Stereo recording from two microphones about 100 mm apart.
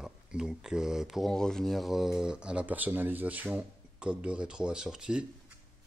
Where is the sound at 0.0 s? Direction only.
5° right (ahead or behind).